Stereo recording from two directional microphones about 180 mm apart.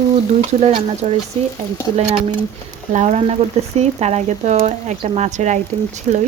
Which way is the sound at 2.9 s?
40° right (ahead or behind).